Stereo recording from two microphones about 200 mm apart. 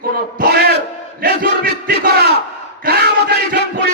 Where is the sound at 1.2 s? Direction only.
50° right (ahead or behind).